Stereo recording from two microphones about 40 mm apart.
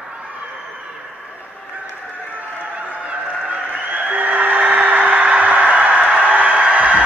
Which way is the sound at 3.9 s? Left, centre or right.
Right.